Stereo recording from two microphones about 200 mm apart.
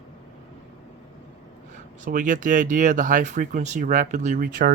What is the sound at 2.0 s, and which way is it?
Speech, 40° right (ahead or behind).